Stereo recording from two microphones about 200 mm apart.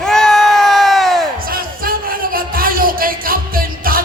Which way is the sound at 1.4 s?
45° right (ahead or behind).